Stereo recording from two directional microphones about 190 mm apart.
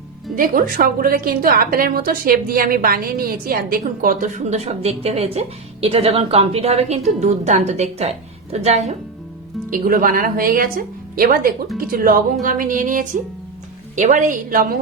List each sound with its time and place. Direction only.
0.3 s a woman's voice: 50° right (ahead or behind)
9.6 s speech: 45° right (ahead or behind)